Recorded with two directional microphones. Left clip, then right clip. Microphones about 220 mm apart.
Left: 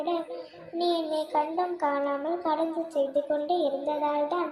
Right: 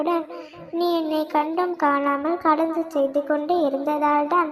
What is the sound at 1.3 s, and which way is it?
A child's voice, 30° right (ahead or behind).